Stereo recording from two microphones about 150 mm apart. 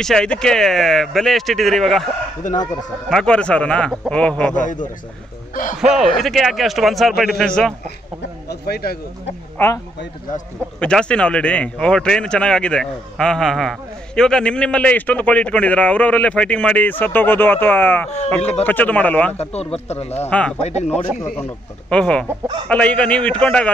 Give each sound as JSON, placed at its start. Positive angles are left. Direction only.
{"t": 0.0, "sound": "speech", "side_deg": 5}
{"t": 3.1, "sound": "a man's voice", "side_deg": 5}
{"t": 4.6, "sound": "a man's voice", "side_deg": 60}
{"t": 5.8, "sound": "speech", "side_deg": 0}
{"t": 8.5, "sound": "a man's voice", "side_deg": 90}
{"t": 9.6, "sound": "a man's voice", "side_deg": 15}
{"t": 10.8, "sound": "a man's voice", "side_deg": 5}
{"t": 19.3, "sound": "a man's voice", "side_deg": 45}
{"t": 20.2, "sound": "a man's voice", "side_deg": 10}
{"t": 20.6, "sound": "a man's voice", "side_deg": 45}
{"t": 21.4, "sound": "a man's voice", "side_deg": 5}